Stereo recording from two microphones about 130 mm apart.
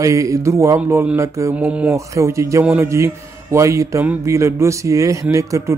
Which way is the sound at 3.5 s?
25° right (ahead or behind).